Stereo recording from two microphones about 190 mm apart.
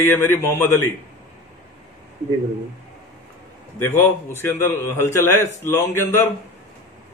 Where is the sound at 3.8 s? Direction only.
10° left (ahead or behind).